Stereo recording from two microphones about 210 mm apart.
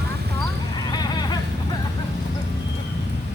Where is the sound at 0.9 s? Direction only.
20° left (ahead or behind).